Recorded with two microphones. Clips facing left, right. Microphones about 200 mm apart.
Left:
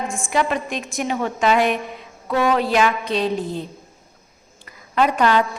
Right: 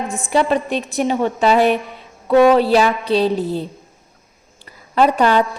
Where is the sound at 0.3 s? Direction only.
35° right (ahead or behind).